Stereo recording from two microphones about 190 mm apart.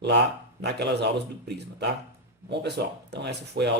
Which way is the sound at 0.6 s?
60° right (ahead or behind).